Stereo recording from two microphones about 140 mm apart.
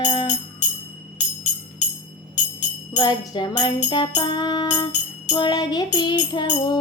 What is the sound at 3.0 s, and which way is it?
Music, 35° left (ahead or behind).